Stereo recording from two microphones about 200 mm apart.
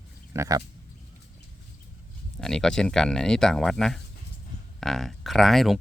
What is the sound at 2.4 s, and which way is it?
Speech, 5° left (ahead or behind).